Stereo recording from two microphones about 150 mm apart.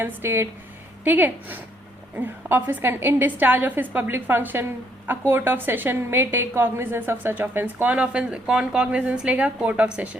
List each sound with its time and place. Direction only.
0.0 s a woman's voice: 15° right (ahead or behind)